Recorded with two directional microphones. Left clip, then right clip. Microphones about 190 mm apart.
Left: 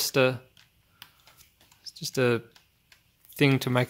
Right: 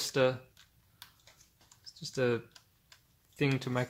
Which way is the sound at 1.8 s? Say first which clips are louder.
Left 6 dB; 35° left (ahead or behind).